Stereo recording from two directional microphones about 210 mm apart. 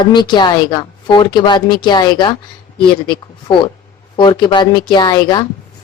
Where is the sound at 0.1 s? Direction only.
20° left (ahead or behind).